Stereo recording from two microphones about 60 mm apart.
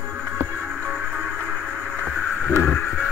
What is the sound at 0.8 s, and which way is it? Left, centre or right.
Music, centre.